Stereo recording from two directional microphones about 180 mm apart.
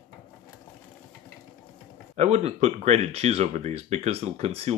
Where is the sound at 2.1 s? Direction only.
40° right (ahead or behind).